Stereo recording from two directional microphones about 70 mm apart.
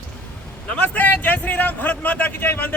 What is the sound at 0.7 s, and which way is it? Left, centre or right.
A man's voice, left.